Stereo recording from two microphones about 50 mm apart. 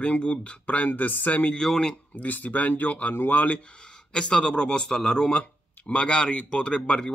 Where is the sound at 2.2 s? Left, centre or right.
Left.